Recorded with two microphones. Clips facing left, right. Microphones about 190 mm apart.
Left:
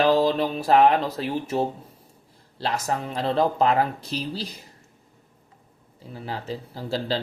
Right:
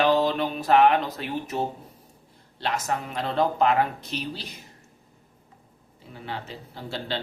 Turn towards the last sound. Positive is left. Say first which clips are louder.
# left 5 dB
turn(degrees=35)  # may be behind; listen again after turning